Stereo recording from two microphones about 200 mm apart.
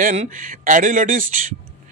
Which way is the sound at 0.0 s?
40° right (ahead or behind).